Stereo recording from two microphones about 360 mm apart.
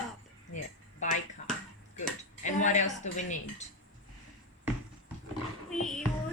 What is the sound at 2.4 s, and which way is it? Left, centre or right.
Speech, centre.